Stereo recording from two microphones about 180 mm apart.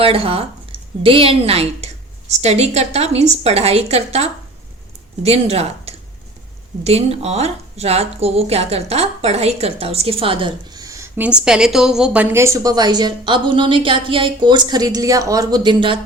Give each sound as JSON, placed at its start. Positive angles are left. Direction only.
{"t": 0.0, "sound": "a woman's voice", "side_deg": -30}
{"t": 11.2, "sound": "a woman's voice", "side_deg": -5}